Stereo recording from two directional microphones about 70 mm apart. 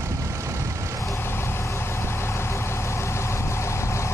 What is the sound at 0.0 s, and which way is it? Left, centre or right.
Vehicle, right.